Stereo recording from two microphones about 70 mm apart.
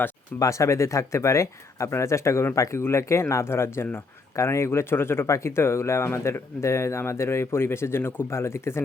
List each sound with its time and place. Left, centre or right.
0.3 s speech: left